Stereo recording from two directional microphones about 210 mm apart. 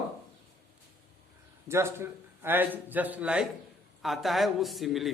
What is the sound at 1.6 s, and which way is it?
A man's voice, 10° right (ahead or behind).